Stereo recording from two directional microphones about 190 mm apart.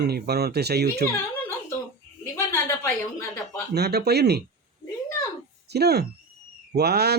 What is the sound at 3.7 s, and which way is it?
Speech, 60° right (ahead or behind).